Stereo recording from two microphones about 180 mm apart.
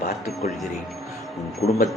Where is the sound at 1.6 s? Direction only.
40° left (ahead or behind).